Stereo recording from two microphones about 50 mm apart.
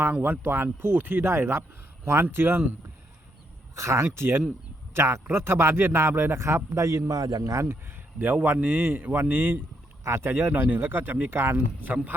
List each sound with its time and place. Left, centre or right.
0.1 s speech: right
3.8 s speech: right
4.9 s speech: right
5.2 s speech: right
6.4 s a man's voice: right
7.5 s speech: right
8.2 s a man's voice: right
9.3 s speech: right
10.0 s speech: right
10.2 s speech: right
10.5 s speech: right